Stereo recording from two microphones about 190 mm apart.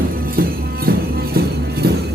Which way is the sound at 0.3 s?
50° right (ahead or behind).